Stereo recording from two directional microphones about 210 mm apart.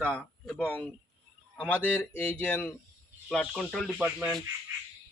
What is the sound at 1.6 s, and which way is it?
Speech, 5° left (ahead or behind).